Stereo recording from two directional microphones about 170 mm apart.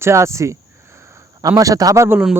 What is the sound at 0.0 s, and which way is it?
A man's voice, 15° right (ahead or behind).